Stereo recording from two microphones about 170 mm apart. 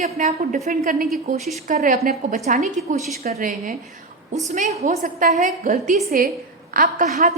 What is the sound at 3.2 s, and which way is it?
A woman's voice, 55° right (ahead or behind).